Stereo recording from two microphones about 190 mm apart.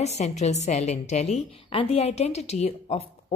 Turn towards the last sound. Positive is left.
turn(degrees=35)  # may be behind; listen again after turning